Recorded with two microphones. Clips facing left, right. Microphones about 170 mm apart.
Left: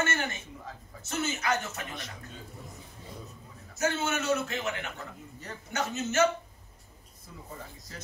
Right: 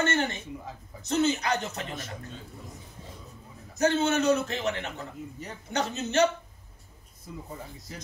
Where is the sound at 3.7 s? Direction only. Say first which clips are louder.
Right 6 dB; 35° right (ahead or behind).